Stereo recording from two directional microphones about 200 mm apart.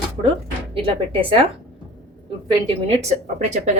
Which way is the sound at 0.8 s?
25° right (ahead or behind).